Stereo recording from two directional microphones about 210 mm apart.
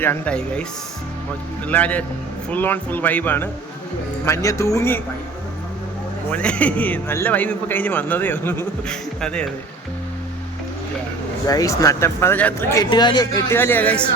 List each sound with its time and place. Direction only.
0.0 s speech: 10° left (ahead or behind)
1.6 s a man's voice: 5° left (ahead or behind)
6.3 s a man's voice: 5° left (ahead or behind)
11.4 s a man's voice: 15° left (ahead or behind)